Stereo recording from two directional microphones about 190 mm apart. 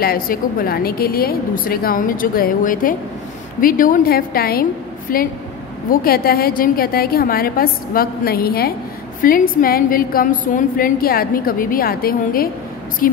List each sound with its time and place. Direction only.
0.0 s a woman's voice: 50° left (ahead or behind)